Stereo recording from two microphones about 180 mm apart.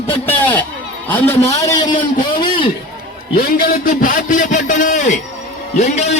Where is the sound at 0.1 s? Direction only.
10° left (ahead or behind).